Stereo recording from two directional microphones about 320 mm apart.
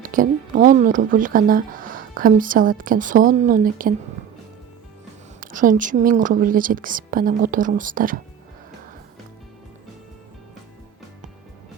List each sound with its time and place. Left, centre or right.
0.0 s a woman's voice: right
5.4 s a woman's voice: right